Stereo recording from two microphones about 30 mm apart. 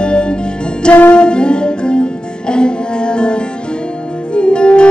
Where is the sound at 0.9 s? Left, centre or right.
Left.